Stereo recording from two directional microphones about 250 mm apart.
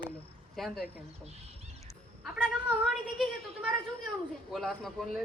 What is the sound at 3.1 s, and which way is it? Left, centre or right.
Speech, centre.